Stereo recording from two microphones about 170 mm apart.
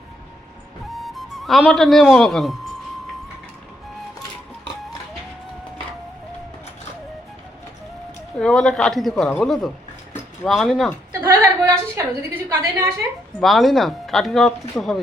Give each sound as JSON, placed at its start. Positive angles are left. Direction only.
{"t": 0.9, "sound": "a man's voice", "side_deg": 0}
{"t": 8.4, "sound": "speech", "side_deg": 5}
{"t": 11.2, "sound": "a woman's voice", "side_deg": -15}
{"t": 13.4, "sound": "speech", "side_deg": 0}